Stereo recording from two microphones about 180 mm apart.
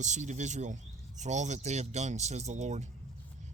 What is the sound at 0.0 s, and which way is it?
Speech, 40° right (ahead or behind).